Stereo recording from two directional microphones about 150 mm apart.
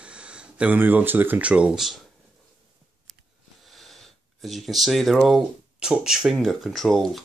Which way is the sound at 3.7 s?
Centre (ahead or behind).